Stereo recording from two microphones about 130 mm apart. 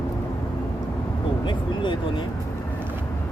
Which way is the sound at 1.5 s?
40° left (ahead or behind).